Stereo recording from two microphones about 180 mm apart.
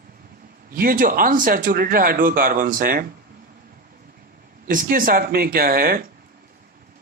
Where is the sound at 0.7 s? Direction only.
50° right (ahead or behind).